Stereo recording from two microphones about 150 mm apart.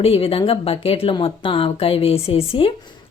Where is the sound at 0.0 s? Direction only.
40° left (ahead or behind).